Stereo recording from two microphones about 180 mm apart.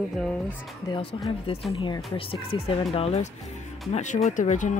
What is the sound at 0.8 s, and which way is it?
Speech, 30° left (ahead or behind).